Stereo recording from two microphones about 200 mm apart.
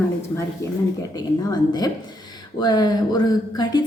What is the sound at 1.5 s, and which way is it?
A woman's voice, 20° left (ahead or behind).